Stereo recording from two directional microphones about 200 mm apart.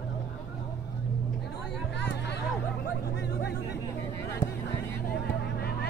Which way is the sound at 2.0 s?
60° left (ahead or behind).